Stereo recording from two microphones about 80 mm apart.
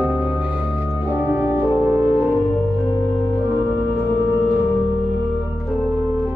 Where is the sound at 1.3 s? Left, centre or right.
Right.